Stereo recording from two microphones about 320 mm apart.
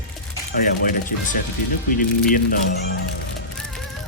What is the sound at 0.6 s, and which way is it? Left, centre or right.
Speech, left.